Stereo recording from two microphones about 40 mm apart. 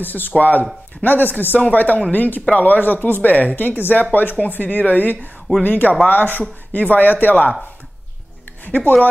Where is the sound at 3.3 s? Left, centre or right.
Left.